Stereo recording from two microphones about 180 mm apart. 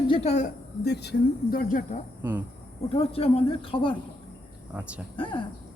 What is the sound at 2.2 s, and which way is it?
Speech, 10° right (ahead or behind).